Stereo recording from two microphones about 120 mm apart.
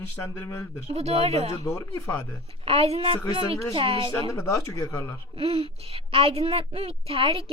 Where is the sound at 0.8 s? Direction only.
55° right (ahead or behind).